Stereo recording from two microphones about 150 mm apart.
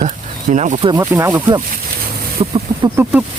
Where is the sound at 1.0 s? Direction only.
15° right (ahead or behind).